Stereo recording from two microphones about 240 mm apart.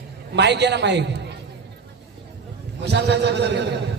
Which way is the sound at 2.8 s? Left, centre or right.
Right.